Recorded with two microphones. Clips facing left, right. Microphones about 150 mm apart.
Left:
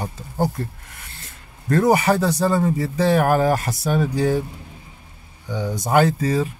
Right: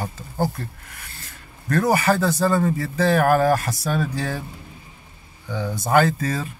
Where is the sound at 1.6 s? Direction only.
20° left (ahead or behind).